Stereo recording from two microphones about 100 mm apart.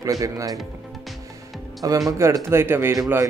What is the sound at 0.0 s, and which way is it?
Speech, 35° right (ahead or behind).